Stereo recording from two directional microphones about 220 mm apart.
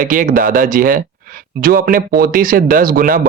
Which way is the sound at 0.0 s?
35° right (ahead or behind).